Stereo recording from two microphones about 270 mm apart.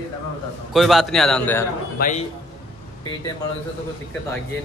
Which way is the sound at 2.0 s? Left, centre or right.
Left.